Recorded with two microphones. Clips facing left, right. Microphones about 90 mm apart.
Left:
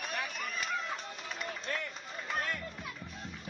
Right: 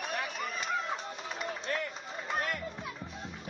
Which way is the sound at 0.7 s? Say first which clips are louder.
Right 4 dB; centre (ahead or behind).